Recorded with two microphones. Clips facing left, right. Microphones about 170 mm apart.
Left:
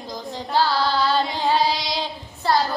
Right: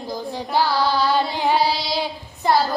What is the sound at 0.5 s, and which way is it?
Carnatic music, 15° right (ahead or behind).